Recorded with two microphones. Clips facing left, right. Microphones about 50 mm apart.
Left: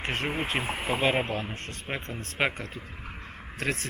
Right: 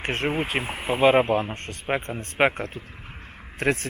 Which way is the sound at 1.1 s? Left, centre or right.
Right.